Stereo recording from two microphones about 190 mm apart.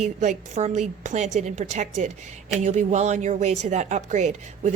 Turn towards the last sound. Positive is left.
turn(degrees=-40)  # may be behind; listen again after turning